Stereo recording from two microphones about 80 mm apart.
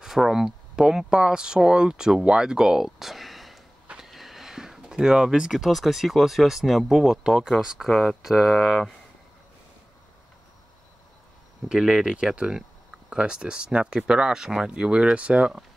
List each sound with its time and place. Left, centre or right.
0.0 s speech: centre
11.7 s speech: centre